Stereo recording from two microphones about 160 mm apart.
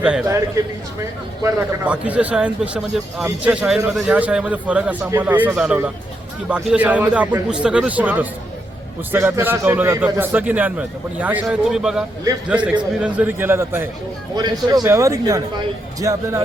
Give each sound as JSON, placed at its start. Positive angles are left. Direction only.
{"t": 1.5, "sound": "speech", "side_deg": -10}
{"t": 14.3, "sound": "speech", "side_deg": -25}